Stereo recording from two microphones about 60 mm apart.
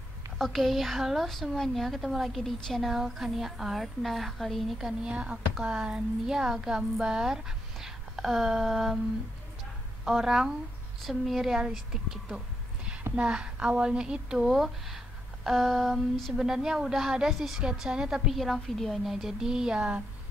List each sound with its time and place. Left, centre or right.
0.4 s a woman's voice: centre
5.1 s speech: centre
10.0 s a woman's voice: centre
14.5 s a woman's voice: centre
16.3 s speech: centre
18.4 s speech: centre